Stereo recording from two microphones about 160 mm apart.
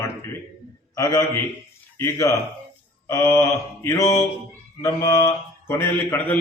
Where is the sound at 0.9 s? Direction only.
20° left (ahead or behind).